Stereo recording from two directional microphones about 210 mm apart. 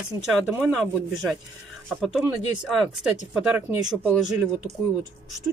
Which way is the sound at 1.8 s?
Centre (ahead or behind).